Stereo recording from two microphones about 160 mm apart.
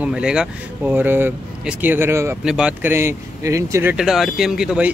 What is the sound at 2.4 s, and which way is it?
Speech, 5° right (ahead or behind).